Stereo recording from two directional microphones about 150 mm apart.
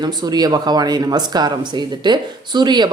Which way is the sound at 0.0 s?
30° right (ahead or behind).